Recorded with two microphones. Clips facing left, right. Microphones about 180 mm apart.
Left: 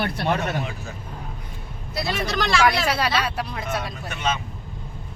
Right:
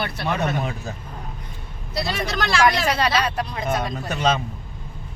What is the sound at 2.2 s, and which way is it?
Speech, centre (ahead or behind).